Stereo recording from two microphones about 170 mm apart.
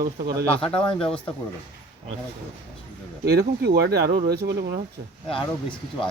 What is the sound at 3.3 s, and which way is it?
Speech, 70° right (ahead or behind).